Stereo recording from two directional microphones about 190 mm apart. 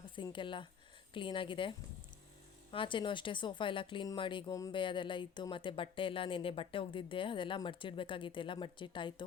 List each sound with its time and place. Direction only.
0.2 s speech: 25° left (ahead or behind)
2.7 s speech: 25° left (ahead or behind)